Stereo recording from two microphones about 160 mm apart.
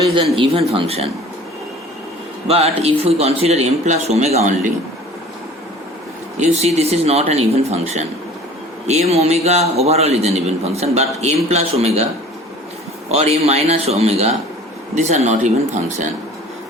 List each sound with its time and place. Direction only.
0.3 s a man's voice: 35° right (ahead or behind)
2.5 s a man's voice: 40° right (ahead or behind)
6.4 s a man's voice: 40° right (ahead or behind)
13.1 s a man's voice: 40° right (ahead or behind)